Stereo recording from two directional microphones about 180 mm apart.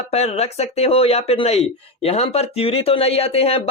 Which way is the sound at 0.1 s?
35° left (ahead or behind).